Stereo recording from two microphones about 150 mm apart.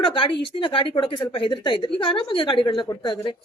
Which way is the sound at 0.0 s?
35° left (ahead or behind).